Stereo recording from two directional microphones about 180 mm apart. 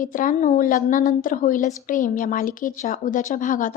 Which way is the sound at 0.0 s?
50° left (ahead or behind).